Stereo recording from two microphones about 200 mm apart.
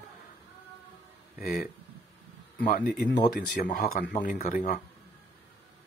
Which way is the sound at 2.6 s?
45° left (ahead or behind).